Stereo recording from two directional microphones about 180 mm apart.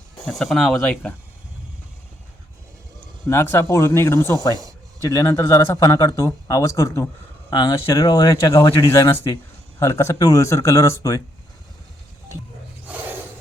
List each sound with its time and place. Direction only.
0.3 s speech: centre (ahead or behind)
3.2 s speech: 15° left (ahead or behind)
12.9 s a sound: 10° right (ahead or behind)